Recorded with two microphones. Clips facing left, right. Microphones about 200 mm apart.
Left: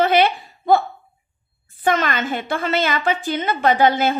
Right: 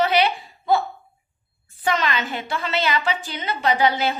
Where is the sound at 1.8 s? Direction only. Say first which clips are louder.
Left 3 dB; 50° left (ahead or behind).